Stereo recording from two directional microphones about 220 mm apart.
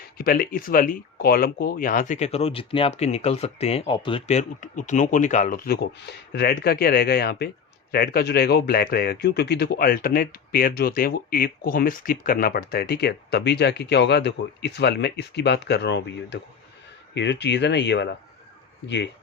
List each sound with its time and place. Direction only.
0.2 s speech: 40° left (ahead or behind)